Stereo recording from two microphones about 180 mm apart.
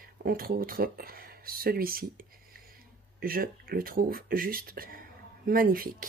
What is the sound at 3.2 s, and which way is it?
Speech, 55° right (ahead or behind).